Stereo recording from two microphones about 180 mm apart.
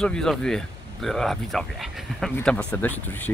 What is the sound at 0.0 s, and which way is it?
Speech, 5° left (ahead or behind).